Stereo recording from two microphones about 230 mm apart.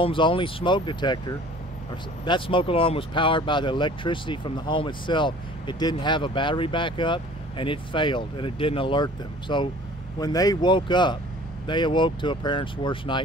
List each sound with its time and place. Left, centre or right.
0.0 s speech: left